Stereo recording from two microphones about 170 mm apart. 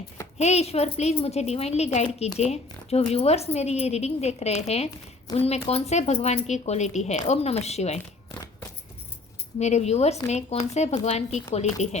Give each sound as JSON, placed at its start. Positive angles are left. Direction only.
{"t": 0.3, "sound": "speech", "side_deg": 40}
{"t": 8.3, "sound": "a sound", "side_deg": 15}
{"t": 9.6, "sound": "speech", "side_deg": 40}